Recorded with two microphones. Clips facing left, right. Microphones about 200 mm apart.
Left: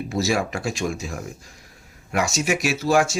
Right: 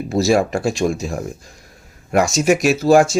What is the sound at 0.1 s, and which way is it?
Speech, 40° right (ahead or behind).